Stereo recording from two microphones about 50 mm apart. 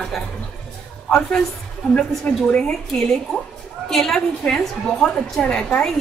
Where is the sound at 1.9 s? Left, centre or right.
Centre.